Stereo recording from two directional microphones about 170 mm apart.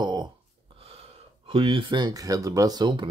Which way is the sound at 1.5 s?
30° right (ahead or behind).